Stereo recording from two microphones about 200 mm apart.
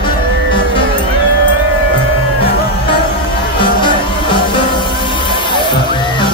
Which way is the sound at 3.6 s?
25° left (ahead or behind).